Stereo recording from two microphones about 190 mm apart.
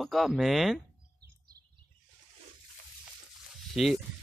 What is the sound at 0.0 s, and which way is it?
Speech, centre (ahead or behind).